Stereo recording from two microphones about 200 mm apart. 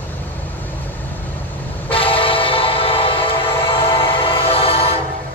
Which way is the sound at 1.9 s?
25° left (ahead or behind).